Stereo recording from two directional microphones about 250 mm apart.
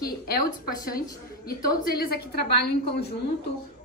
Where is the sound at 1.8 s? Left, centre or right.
Left.